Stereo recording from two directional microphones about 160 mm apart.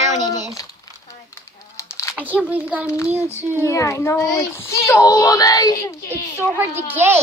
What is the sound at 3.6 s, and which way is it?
A child's voice, 20° left (ahead or behind).